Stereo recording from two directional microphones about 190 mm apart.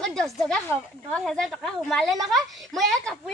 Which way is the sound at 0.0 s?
Centre (ahead or behind).